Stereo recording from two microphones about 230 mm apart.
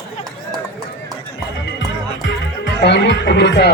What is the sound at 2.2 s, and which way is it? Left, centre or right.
Music, left.